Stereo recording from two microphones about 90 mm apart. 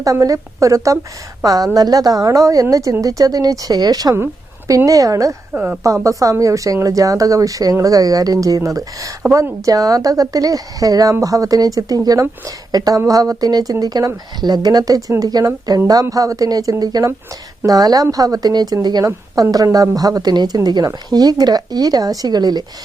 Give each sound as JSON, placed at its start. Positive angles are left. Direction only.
{"t": 0.0, "sound": "a woman's voice", "side_deg": -40}
{"t": 5.5, "sound": "speech", "side_deg": -20}
{"t": 5.8, "sound": "a woman's voice", "side_deg": -35}